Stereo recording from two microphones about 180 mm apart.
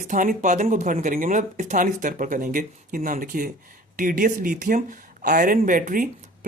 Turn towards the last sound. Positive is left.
turn(degrees=-50)  # may be behind; listen again after turning